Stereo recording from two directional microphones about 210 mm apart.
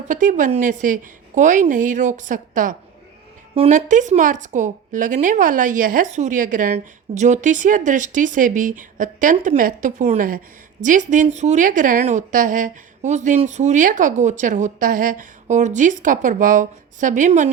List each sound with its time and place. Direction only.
0.1 s a woman's voice: 40° right (ahead or behind)